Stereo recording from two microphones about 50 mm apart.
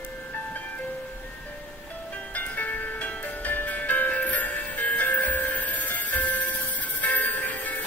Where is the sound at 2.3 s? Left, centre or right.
Left.